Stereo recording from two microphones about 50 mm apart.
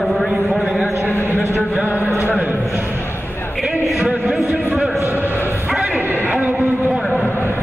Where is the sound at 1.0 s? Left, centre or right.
Left.